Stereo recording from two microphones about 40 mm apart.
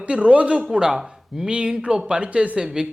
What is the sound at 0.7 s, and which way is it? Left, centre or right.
A man's voice, centre.